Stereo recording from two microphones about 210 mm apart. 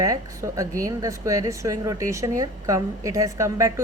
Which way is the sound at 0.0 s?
15° right (ahead or behind).